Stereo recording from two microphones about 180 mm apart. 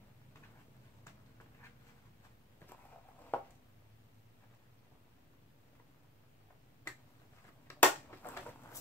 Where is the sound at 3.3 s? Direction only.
10° left (ahead or behind).